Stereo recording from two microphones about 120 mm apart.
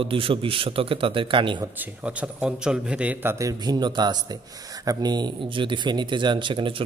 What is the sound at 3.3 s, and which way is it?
Speech, 30° right (ahead or behind).